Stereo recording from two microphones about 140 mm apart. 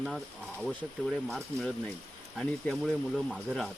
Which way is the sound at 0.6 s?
Centre (ahead or behind).